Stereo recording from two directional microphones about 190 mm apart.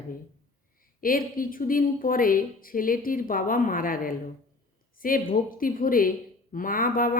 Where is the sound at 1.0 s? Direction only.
50° left (ahead or behind).